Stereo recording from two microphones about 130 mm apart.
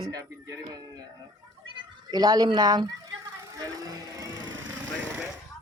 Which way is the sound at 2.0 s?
30° right (ahead or behind).